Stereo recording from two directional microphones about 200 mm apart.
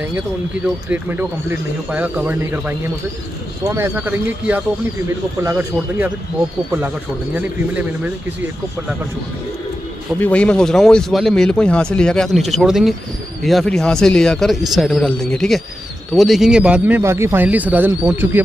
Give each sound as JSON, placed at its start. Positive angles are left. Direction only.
{"t": 0.8, "sound": "speech", "side_deg": -10}
{"t": 7.3, "sound": "speech", "side_deg": -5}
{"t": 10.2, "sound": "speech", "side_deg": 5}